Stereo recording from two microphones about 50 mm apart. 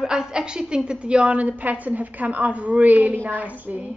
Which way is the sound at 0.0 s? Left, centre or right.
Centre.